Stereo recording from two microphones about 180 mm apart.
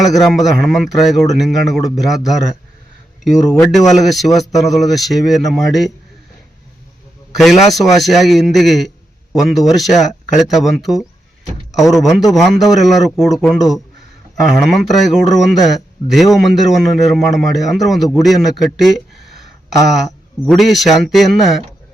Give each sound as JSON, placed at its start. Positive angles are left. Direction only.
{"t": 0.0, "sound": "a man's voice", "side_deg": 0}
{"t": 3.6, "sound": "a man's voice", "side_deg": 0}
{"t": 7.3, "sound": "a man's voice", "side_deg": 0}
{"t": 20.4, "sound": "a man's voice", "side_deg": 0}